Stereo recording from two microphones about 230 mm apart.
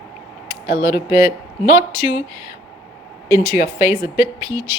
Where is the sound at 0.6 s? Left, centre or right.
Left.